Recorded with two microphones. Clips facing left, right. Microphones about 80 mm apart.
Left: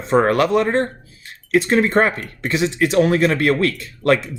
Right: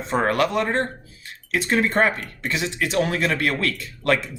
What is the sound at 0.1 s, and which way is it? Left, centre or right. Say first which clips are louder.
Speech: left 6 dB; left.